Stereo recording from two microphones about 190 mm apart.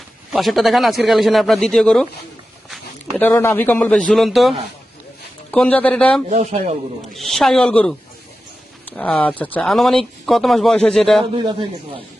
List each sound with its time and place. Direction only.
0.3 s speech: centre (ahead or behind)
3.2 s speech: 10° left (ahead or behind)
6.3 s speech: 35° right (ahead or behind)
7.1 s speech: centre (ahead or behind)